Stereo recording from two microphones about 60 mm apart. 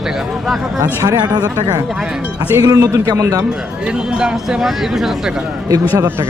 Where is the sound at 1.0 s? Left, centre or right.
Right.